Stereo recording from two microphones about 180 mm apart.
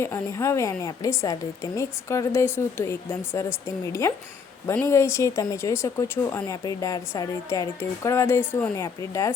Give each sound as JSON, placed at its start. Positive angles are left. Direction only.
{"t": 0.0, "sound": "speech", "side_deg": 15}
{"t": 4.6, "sound": "speech", "side_deg": 15}